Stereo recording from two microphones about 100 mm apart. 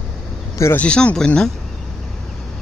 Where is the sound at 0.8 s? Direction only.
10° left (ahead or behind).